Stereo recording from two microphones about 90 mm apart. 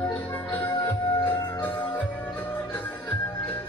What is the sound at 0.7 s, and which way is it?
Music, 55° left (ahead or behind).